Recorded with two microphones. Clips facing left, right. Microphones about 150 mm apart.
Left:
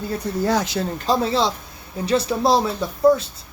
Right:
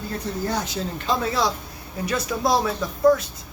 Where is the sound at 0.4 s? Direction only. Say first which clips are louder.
Left 7 dB; 90° left.